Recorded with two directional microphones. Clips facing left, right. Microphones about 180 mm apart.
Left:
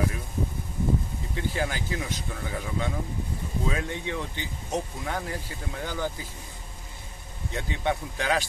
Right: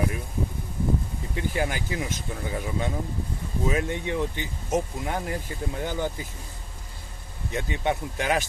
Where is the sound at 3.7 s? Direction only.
20° right (ahead or behind).